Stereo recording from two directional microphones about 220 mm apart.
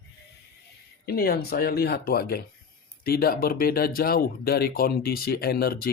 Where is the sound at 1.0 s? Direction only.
45° left (ahead or behind).